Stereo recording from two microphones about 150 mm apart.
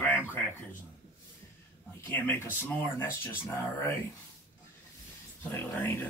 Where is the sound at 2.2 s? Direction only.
15° left (ahead or behind).